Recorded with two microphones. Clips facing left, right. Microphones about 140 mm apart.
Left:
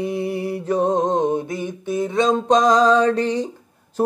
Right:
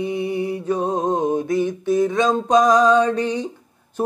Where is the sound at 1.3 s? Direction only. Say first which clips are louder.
Right 5 dB; 20° left (ahead or behind).